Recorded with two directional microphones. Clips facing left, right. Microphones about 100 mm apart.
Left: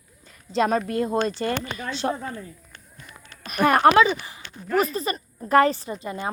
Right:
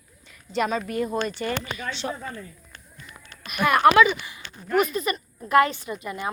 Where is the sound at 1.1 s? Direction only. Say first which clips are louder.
Left 3 dB; 35° left (ahead or behind).